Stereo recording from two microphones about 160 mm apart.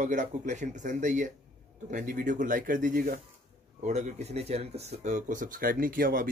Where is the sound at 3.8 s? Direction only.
45° right (ahead or behind); by 6.3 s 65° right (ahead or behind).